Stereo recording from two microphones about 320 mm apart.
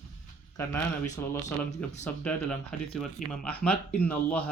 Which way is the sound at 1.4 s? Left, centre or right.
Left.